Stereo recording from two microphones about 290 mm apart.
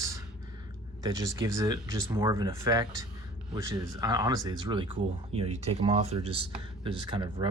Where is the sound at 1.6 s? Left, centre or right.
Centre.